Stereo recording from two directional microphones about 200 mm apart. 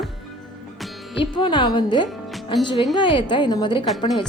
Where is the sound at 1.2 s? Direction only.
25° left (ahead or behind).